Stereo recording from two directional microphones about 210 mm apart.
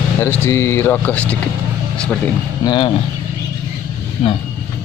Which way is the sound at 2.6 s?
20° left (ahead or behind).